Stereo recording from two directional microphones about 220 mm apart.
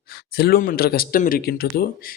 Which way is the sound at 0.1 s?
45° left (ahead or behind).